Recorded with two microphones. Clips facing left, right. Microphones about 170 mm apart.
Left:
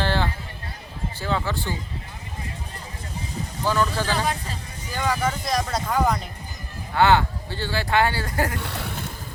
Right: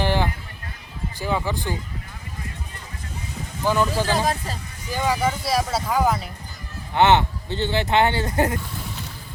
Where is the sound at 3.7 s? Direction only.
15° right (ahead or behind).